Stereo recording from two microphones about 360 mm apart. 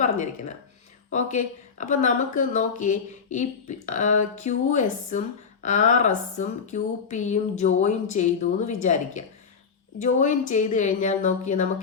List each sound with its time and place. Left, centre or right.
1.1 s speech: centre